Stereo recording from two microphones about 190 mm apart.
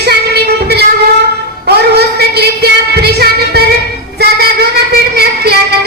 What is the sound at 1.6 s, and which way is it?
Music, 60° right (ahead or behind).